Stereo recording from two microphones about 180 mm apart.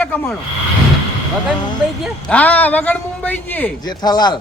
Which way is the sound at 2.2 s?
10° left (ahead or behind).